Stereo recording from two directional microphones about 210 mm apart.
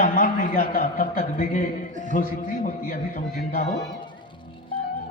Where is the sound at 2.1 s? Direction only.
40° left (ahead or behind).